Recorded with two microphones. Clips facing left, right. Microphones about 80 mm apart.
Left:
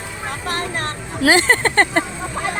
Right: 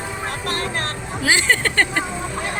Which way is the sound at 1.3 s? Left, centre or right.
Left.